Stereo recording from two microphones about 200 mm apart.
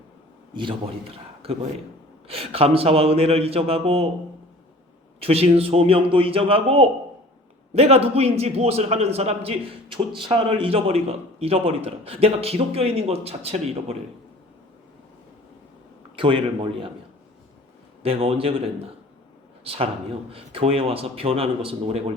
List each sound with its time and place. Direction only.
0.5 s a man's voice: 25° right (ahead or behind)
5.2 s a man's voice: 30° right (ahead or behind)
16.1 s a man's voice: 25° right (ahead or behind)
18.0 s a man's voice: 30° right (ahead or behind)